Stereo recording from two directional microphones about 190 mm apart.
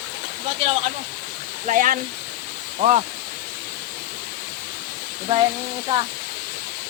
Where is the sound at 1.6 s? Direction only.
45° right (ahead or behind).